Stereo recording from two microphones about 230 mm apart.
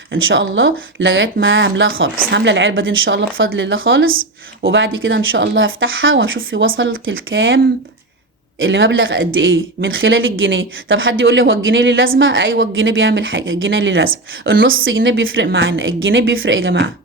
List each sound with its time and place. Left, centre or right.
0.1 s speech: right